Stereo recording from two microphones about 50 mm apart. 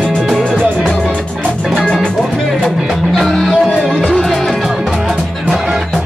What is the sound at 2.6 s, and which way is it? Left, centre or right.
Music, centre.